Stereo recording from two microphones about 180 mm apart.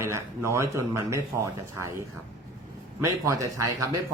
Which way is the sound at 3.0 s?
15° right (ahead or behind).